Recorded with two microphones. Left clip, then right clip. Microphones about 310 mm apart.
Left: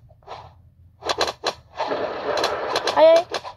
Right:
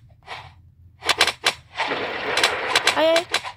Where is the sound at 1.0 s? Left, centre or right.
Right.